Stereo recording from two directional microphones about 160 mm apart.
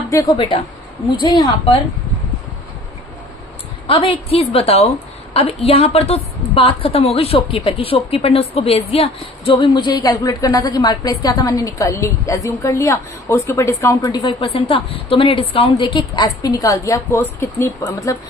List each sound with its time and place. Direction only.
0.1 s a woman's voice: 20° left (ahead or behind)
1.2 s a woman's voice: 30° left (ahead or behind)
3.8 s a woman's voice: 35° left (ahead or behind)